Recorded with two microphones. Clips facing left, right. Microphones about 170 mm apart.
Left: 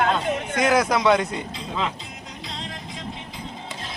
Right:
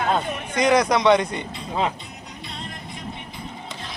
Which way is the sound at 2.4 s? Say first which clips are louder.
Left 1 dB; 90° left.